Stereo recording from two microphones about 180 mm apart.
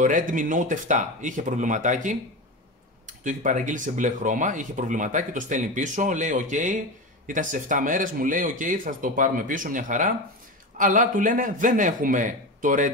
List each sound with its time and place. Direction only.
0.0 s speech: 45° right (ahead or behind)